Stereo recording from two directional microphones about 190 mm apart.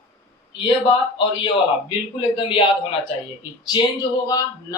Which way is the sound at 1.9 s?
25° left (ahead or behind).